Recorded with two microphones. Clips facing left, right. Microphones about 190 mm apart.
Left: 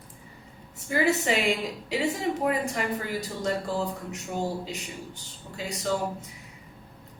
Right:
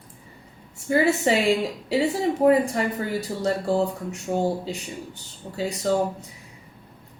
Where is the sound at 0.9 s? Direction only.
30° right (ahead or behind).